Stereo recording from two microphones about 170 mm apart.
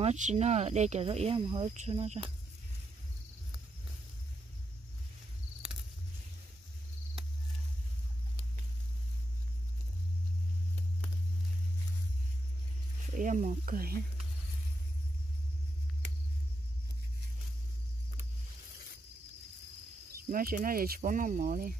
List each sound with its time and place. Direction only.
0.0 s speech: 45° right (ahead or behind)
13.1 s speech: 50° right (ahead or behind)
20.2 s speech: 55° right (ahead or behind)